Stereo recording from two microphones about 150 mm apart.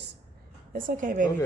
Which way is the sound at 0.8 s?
65° right (ahead or behind).